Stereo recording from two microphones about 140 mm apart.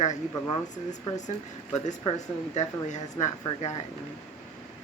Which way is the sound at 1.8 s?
55° left (ahead or behind).